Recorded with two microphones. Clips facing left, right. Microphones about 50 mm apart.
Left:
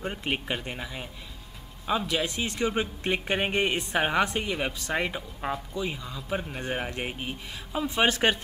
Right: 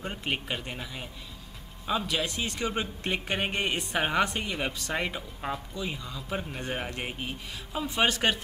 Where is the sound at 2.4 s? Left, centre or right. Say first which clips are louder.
Left 3 dB; centre.